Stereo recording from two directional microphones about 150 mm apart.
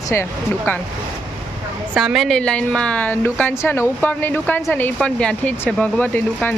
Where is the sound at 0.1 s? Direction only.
15° left (ahead or behind).